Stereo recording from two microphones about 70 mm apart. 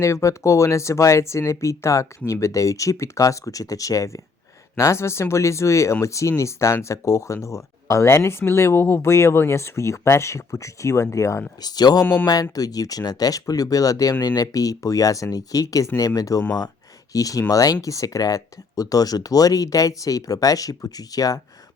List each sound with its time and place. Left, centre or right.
0.0 s speech: left
11.6 s speech: left